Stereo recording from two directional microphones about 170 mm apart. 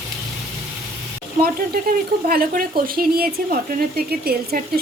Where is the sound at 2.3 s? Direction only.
60° right (ahead or behind).